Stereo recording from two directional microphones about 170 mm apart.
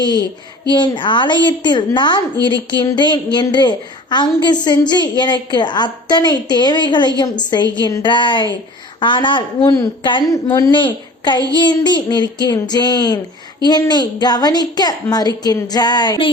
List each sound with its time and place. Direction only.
0.7 s a woman's voice: 25° left (ahead or behind)